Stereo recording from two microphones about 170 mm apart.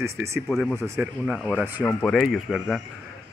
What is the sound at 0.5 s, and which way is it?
Speech, 5° left (ahead or behind).